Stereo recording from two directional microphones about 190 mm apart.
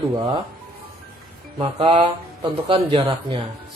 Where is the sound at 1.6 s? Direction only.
30° right (ahead or behind).